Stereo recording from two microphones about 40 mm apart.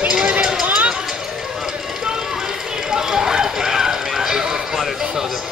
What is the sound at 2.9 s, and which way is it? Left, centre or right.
Run, centre.